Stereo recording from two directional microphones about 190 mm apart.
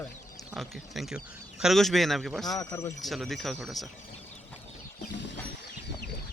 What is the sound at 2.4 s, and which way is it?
Speech, 20° left (ahead or behind).